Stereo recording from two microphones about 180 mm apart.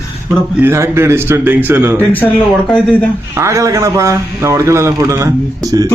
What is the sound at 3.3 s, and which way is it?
A man's voice, 15° right (ahead or behind).